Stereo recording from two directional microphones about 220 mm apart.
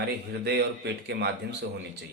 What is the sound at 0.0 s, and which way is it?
Speech, 50° right (ahead or behind).